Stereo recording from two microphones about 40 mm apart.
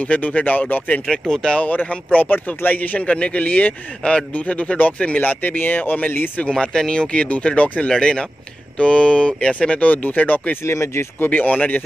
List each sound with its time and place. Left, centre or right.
0.1 s speech: left
1.1 s speech: centre
1.6 s speech: left
3.1 s speech: left
3.4 s speech: left
6.9 s speech: left